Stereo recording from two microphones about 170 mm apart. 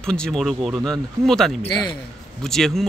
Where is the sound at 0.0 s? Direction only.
5° left (ahead or behind).